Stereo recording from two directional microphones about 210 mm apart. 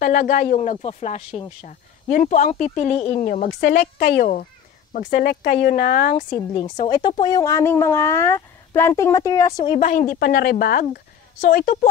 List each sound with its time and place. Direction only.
0.0 s speech: 40° left (ahead or behind)
3.3 s speech: 50° left (ahead or behind)
6.1 s a woman's voice: 20° left (ahead or behind)
9.8 s speech: 40° left (ahead or behind)